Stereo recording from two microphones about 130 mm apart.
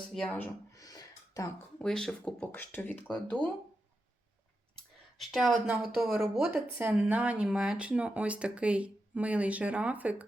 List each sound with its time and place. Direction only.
0.1 s speech: 5° left (ahead or behind)
0.8 s a sound: 30° left (ahead or behind)
1.8 s speech: 5° left (ahead or behind)
5.1 s a woman's voice: centre (ahead or behind)
6.5 s speech: 15° right (ahead or behind)